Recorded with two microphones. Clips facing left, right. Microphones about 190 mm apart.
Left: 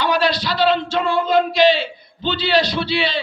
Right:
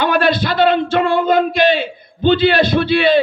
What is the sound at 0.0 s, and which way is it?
A man's voice, 55° right (ahead or behind).